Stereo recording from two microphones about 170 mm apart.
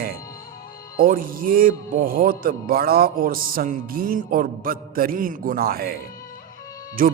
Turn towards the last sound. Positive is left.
turn(degrees=-55)  # may be behind; listen again after turning